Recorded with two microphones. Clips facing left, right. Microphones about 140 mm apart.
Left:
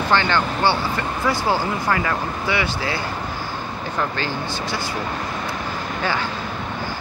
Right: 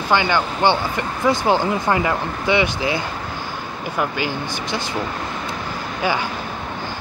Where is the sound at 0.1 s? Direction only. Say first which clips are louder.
Right 2 dB; 15° right (ahead or behind).